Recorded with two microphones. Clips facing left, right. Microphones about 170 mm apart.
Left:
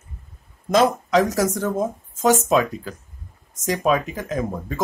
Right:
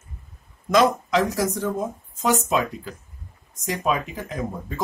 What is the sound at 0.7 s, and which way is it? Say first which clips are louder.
Speech: left 2 dB; 40° left (ahead or behind).